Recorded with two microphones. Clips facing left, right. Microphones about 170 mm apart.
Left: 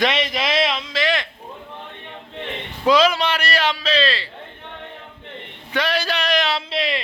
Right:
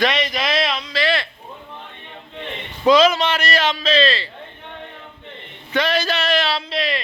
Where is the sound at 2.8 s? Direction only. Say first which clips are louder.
Right 2 dB; 10° left (ahead or behind).